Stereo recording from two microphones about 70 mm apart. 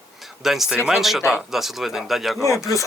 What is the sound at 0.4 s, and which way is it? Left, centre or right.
Speech, centre.